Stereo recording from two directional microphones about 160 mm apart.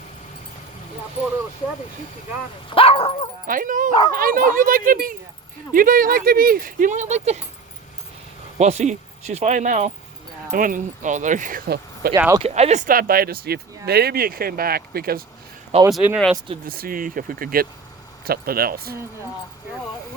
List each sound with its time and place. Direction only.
2.6 s speech: 35° left (ahead or behind)
3.4 s speech: 60° right (ahead or behind)
8.5 s speech: 45° right (ahead or behind); by 12.1 s 70° right (ahead or behind)
12.4 s speech: 40° right (ahead or behind); by 15.2 s 70° right (ahead or behind)
15.9 s speech: centre (ahead or behind)
16.6 s speech: 65° right (ahead or behind)